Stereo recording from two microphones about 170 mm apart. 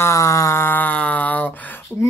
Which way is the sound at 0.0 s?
20° left (ahead or behind).